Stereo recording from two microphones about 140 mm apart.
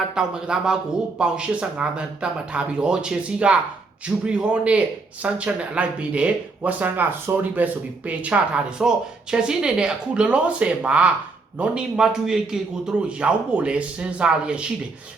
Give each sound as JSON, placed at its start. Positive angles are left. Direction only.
{"t": 0.1, "sound": "a man's voice", "side_deg": -5}